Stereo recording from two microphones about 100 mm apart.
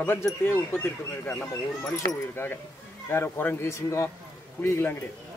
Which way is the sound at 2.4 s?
20° left (ahead or behind).